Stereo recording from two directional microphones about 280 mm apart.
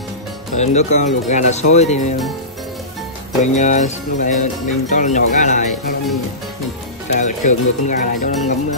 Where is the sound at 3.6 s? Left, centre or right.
Left.